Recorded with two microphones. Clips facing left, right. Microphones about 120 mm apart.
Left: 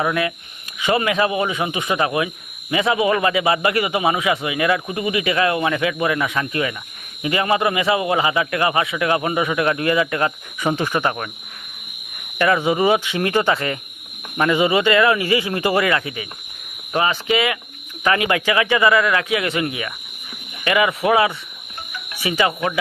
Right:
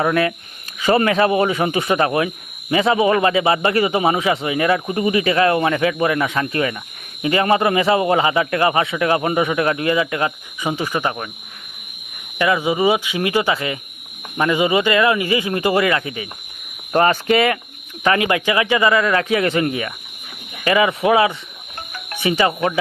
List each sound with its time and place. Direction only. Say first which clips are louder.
0.0 s speech: right 3 dB; 35° right (ahead or behind); by 10.3 s 20° right (ahead or behind)
10.6 s speech: left 1 dB; 10° right (ahead or behind)
12.5 s speech: even; 10° right (ahead or behind); by 16.2 s 30° right (ahead or behind)
16.9 s speech: right 4 dB; 45° right (ahead or behind)
18.3 s speech: right 1 dB; 25° right (ahead or behind)